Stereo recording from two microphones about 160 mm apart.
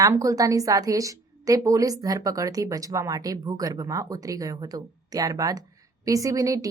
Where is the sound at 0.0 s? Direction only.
20° right (ahead or behind).